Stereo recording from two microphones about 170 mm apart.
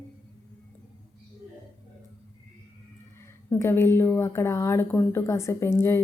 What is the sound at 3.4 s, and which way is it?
A woman's voice, 15° left (ahead or behind).